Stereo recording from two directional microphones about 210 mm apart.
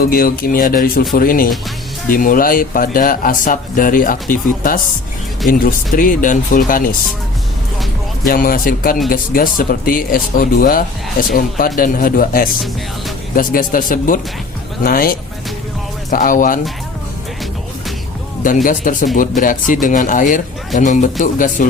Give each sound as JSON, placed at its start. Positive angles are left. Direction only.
{"t": 0.0, "sound": "speech", "side_deg": 45}
{"t": 6.0, "sound": "speech", "side_deg": 40}
{"t": 8.2, "sound": "speech", "side_deg": 45}
{"t": 18.4, "sound": "speech", "side_deg": 40}